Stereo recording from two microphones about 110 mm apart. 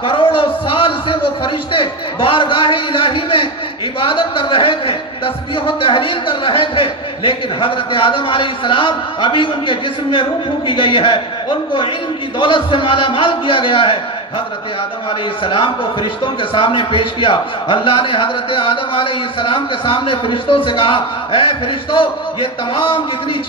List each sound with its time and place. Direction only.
0.0 s a man's voice: 50° left (ahead or behind)
15.4 s speech: 50° left (ahead or behind)